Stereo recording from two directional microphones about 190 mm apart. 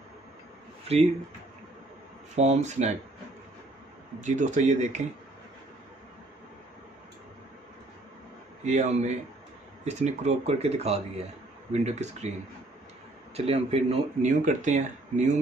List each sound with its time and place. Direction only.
2.3 s speech: 35° right (ahead or behind)
4.2 s speech: 40° right (ahead or behind)
8.6 s speech: 40° right (ahead or behind)
13.5 s speech: 30° right (ahead or behind)